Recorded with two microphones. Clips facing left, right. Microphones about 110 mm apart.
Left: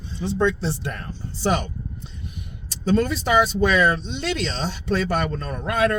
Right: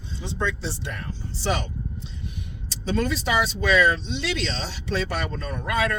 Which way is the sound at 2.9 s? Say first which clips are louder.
Left 5 dB; 45° left (ahead or behind).